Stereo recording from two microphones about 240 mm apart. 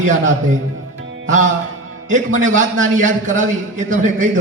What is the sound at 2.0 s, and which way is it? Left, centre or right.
A man's voice, right.